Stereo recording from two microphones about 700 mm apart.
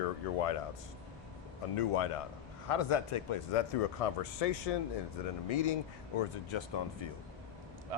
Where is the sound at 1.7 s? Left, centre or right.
Left.